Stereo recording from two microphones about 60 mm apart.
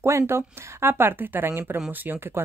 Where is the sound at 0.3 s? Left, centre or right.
Right.